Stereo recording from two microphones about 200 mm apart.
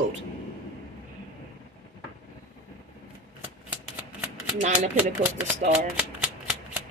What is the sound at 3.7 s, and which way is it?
Shuffling cards, 5° right (ahead or behind).